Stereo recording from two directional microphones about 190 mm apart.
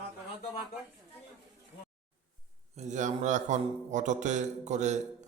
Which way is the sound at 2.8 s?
40° right (ahead or behind).